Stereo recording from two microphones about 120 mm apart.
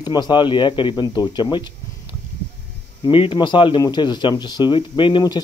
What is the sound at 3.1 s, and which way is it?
Speech, 45° left (ahead or behind).